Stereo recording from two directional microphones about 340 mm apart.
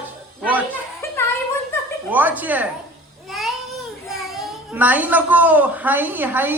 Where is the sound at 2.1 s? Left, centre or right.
Centre.